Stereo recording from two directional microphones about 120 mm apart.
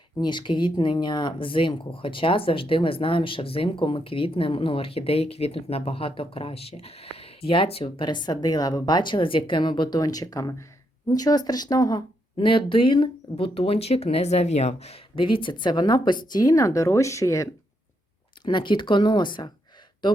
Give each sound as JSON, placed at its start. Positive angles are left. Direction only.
{"t": 0.2, "sound": "speech", "side_deg": 40}
{"t": 8.0, "sound": "a woman's voice", "side_deg": 40}
{"t": 15.2, "sound": "a woman's voice", "side_deg": 45}
{"t": 18.4, "sound": "a woman's voice", "side_deg": 40}